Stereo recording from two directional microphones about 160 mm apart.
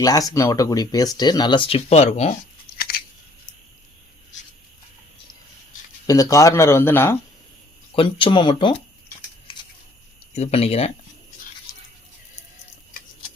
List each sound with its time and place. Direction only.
0.0 s speech: 20° left (ahead or behind); by 2.3 s 40° left (ahead or behind)
2.7 s scissors: 70° left (ahead or behind)
6.1 s speech: 20° left (ahead or behind)
7.9 s speech: 30° left (ahead or behind)
10.3 s speech: 40° left (ahead or behind)